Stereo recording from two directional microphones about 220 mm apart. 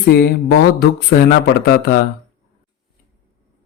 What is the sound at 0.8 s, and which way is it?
Speech, 45° left (ahead or behind).